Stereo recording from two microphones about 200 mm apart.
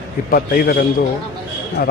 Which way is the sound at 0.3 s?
45° left (ahead or behind).